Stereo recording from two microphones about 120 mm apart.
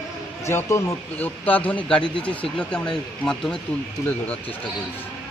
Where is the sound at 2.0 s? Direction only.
45° left (ahead or behind).